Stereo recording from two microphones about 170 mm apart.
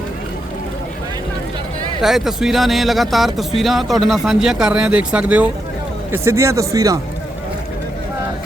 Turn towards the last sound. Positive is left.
turn(degrees=-20)  # may be behind; listen again after turning